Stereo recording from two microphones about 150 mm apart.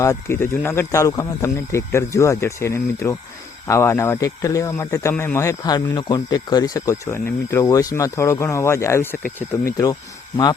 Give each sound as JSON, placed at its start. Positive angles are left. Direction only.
{"t": 0.0, "sound": "speech", "side_deg": 20}